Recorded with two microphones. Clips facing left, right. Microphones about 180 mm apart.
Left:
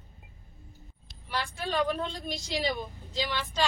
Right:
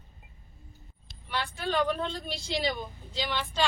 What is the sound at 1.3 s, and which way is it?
Speech, 10° left (ahead or behind).